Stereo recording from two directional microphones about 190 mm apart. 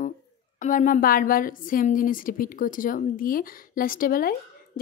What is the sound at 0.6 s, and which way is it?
A woman's voice, 40° left (ahead or behind).